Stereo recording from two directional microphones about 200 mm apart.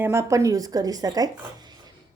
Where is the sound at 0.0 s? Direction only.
15° right (ahead or behind).